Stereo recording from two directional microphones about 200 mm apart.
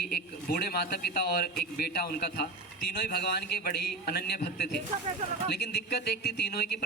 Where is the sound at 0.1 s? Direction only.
50° left (ahead or behind).